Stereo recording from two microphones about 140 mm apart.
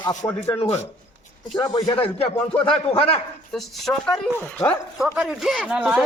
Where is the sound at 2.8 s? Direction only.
40° left (ahead or behind).